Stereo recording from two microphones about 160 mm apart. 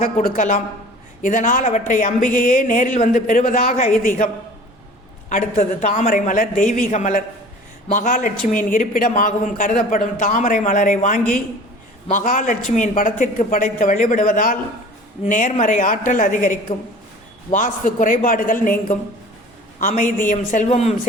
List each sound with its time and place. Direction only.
0.0 s a man's voice: 60° left (ahead or behind)
5.3 s a man's voice: 50° left (ahead or behind)
19.8 s speech: 55° left (ahead or behind)